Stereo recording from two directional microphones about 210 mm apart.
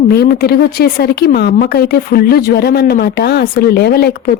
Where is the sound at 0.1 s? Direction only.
45° left (ahead or behind).